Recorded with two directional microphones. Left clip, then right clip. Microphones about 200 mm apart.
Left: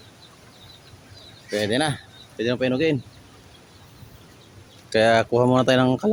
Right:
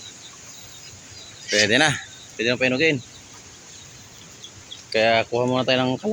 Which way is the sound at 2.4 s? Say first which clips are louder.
Right 2 dB; 20° left (ahead or behind).